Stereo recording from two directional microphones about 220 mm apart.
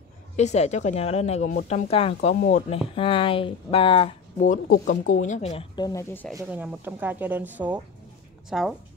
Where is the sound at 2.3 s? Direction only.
40° left (ahead or behind).